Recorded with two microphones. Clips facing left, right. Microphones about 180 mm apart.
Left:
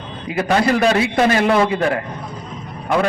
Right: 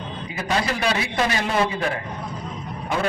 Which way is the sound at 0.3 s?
55° left (ahead or behind).